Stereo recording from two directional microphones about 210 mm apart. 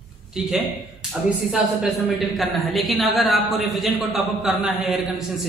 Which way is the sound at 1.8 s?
Centre (ahead or behind).